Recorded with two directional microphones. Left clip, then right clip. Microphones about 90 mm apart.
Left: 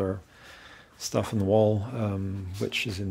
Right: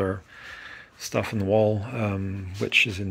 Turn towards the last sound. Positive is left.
turn(degrees=-5)  # may be behind; listen again after turning